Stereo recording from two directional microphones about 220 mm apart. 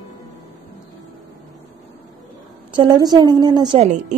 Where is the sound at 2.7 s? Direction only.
20° right (ahead or behind).